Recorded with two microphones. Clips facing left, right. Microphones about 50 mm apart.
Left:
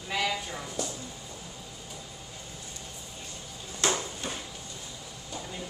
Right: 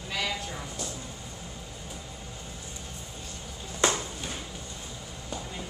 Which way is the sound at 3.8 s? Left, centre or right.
Right.